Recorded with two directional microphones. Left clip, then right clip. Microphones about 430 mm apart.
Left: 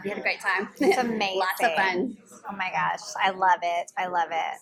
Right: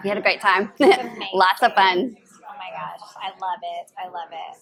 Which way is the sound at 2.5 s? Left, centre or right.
Left.